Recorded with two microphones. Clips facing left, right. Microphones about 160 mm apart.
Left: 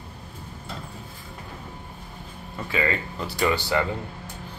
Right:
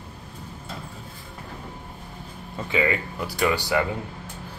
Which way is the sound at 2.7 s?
15° right (ahead or behind).